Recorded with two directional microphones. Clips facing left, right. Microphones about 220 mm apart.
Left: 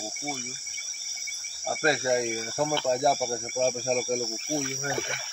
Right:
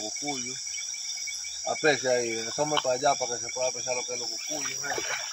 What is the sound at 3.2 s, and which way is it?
Cricket, 35° left (ahead or behind).